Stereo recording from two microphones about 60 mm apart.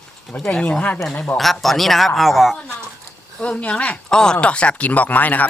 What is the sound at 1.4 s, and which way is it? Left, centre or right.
A man's voice, centre.